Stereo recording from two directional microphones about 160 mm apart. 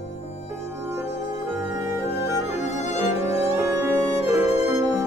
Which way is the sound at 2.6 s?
45° left (ahead or behind).